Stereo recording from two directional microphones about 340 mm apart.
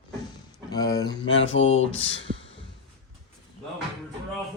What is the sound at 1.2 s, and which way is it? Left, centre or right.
Mantra, left.